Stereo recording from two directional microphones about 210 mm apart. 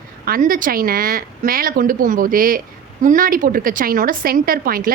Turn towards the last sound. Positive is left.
turn(degrees=-45)  # may be behind; listen again after turning